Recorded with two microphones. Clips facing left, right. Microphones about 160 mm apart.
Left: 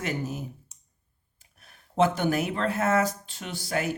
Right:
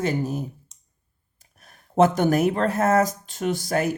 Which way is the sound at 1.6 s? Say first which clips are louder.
Right 5 dB; 40° right (ahead or behind).